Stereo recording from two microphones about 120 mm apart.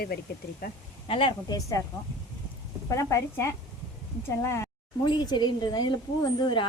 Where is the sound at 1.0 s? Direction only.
50° left (ahead or behind).